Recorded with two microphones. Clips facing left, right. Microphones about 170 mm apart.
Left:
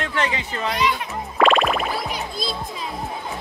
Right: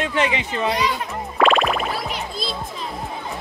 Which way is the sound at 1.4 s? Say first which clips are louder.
Even; centre (ahead or behind).